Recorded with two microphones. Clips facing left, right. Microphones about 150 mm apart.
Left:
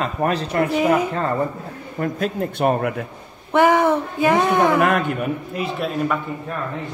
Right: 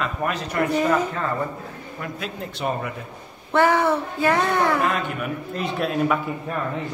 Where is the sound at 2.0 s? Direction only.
45° left (ahead or behind).